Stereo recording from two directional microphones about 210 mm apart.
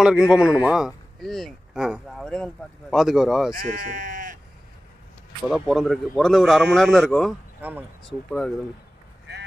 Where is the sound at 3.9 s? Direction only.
40° right (ahead or behind).